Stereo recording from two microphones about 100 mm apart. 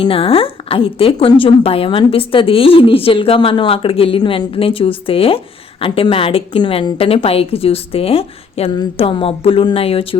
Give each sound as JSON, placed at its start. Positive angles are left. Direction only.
{"t": 0.0, "sound": "a woman's voice", "side_deg": 70}
{"t": 9.0, "sound": "a woman's voice", "side_deg": 70}